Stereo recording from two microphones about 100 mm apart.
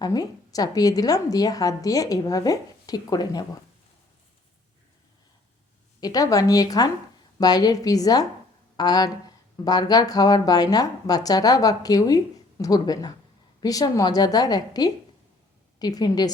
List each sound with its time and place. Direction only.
0.0 s speech: 40° left (ahead or behind)
6.0 s speech: 40° left (ahead or behind)